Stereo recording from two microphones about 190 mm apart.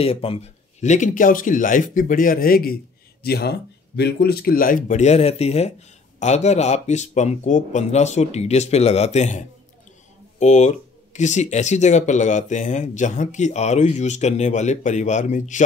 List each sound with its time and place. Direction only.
0.0 s speech: 30° left (ahead or behind)
10.4 s speech: 35° left (ahead or behind)